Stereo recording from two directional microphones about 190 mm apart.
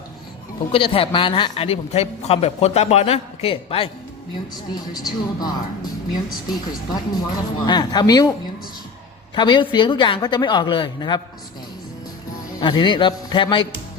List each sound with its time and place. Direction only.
0.7 s speech: 30° left (ahead or behind)
6.9 s speech: 20° left (ahead or behind)
9.3 s speech: 25° left (ahead or behind)
12.5 s speech: 25° left (ahead or behind)